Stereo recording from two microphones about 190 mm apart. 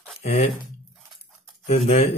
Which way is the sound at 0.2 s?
35° left (ahead or behind).